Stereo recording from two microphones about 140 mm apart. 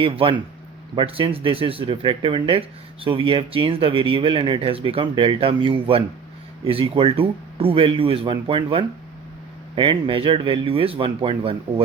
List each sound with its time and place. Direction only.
0.0 s speech: 40° right (ahead or behind)